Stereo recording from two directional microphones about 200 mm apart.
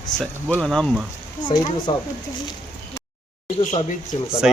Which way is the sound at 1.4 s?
25° left (ahead or behind).